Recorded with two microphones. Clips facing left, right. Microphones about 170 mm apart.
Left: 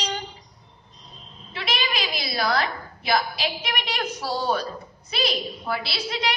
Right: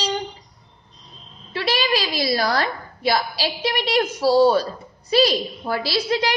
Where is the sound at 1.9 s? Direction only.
35° right (ahead or behind).